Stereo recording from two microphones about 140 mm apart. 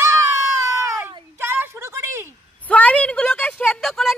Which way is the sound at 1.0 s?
15° right (ahead or behind).